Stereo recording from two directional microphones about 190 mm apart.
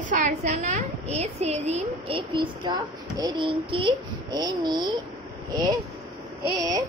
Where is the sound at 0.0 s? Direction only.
40° right (ahead or behind); by 5.8 s 20° right (ahead or behind).